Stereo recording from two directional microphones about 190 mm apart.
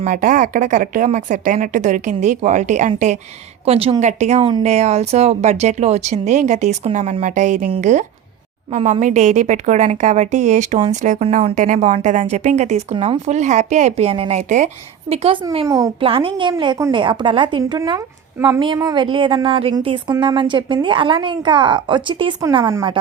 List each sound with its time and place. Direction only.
0.0 s a woman's voice: 45° right (ahead or behind); by 15.9 s 20° right (ahead or behind)
16.0 s speech: 30° right (ahead or behind)